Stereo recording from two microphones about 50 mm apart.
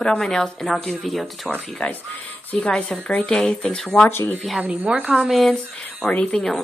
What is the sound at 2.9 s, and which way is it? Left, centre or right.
Speech, centre.